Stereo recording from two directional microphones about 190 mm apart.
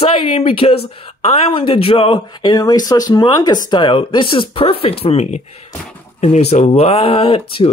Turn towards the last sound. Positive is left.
turn(degrees=30)  # may be behind; listen again after turning